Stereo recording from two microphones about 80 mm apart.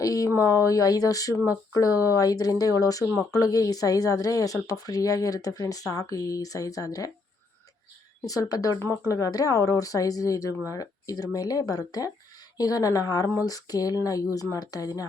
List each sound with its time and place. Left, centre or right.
0.0 s a sound: left
0.3 s speech: left
8.2 s speech: left